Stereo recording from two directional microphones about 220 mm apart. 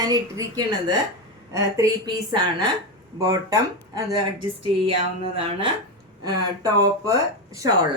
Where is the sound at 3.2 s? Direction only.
15° right (ahead or behind).